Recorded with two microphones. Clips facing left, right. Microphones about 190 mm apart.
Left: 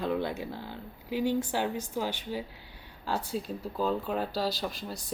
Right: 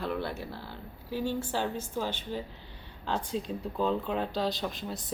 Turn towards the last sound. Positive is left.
turn(degrees=0)  # may be behind; listen again after turning